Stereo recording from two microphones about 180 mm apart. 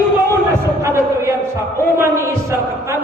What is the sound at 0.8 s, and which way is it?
A man's voice, 15° right (ahead or behind).